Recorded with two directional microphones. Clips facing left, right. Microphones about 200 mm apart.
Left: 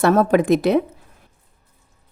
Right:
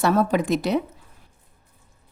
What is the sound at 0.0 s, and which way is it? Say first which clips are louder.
Speech: left 5 dB; 55° left (ahead or behind).